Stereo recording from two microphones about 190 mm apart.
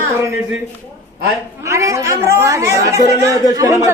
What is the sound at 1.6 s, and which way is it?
A woman's voice, 15° right (ahead or behind).